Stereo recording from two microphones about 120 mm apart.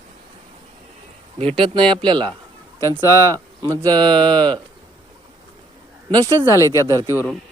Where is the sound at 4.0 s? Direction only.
40° right (ahead or behind).